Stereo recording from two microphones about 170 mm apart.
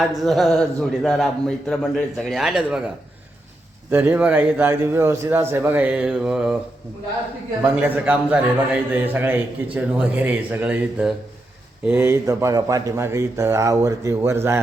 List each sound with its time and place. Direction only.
0.0 s a man's voice: centre (ahead or behind)
3.9 s speech: 10° right (ahead or behind)
7.6 s speech: 10° right (ahead or behind)